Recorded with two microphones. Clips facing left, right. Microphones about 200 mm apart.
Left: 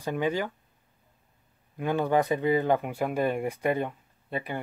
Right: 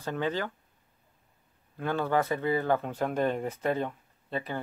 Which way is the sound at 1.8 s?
15° left (ahead or behind).